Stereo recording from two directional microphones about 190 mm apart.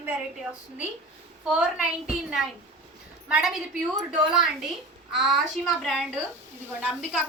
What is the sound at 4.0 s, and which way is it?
A woman's voice, centre (ahead or behind).